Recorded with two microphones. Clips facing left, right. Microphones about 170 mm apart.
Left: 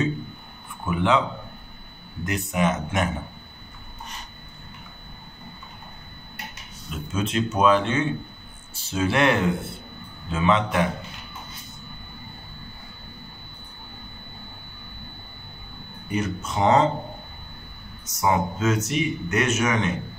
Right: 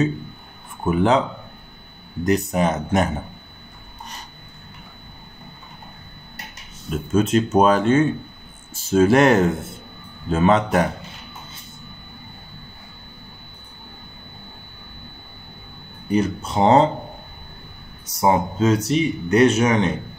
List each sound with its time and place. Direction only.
0.8 s speech: 40° right (ahead or behind)
2.2 s speech: 40° right (ahead or behind)
6.9 s speech: 45° right (ahead or behind)
16.1 s speech: 30° right (ahead or behind)
18.0 s speech: 30° right (ahead or behind)